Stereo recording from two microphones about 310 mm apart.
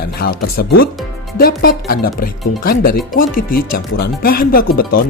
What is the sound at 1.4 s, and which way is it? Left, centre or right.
Speech, left.